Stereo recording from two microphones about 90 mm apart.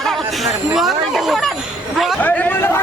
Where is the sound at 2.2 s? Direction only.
20° left (ahead or behind).